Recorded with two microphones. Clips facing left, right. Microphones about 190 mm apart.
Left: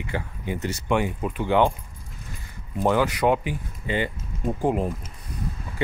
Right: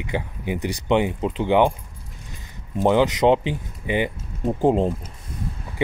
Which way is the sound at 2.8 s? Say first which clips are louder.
Right 4 dB; 20° right (ahead or behind).